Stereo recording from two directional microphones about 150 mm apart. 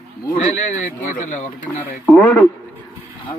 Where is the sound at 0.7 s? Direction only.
55° left (ahead or behind).